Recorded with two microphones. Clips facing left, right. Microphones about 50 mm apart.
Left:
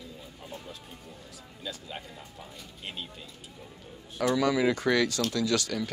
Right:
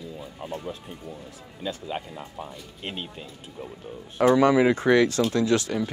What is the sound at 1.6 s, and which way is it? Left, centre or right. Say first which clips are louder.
Speech: right 8 dB; right.